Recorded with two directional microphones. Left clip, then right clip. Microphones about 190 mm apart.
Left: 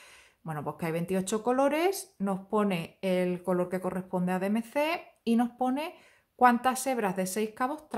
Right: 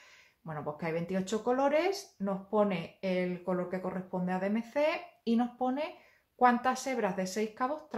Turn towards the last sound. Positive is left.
turn(degrees=40)  # may be behind; listen again after turning